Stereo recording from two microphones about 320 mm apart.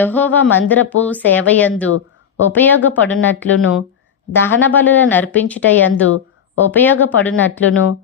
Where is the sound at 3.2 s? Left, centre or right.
Left.